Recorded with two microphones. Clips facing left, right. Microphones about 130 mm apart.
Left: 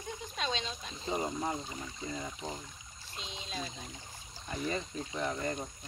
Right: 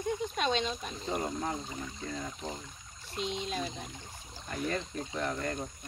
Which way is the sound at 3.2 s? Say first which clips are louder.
Right 8 dB; 50° right (ahead or behind).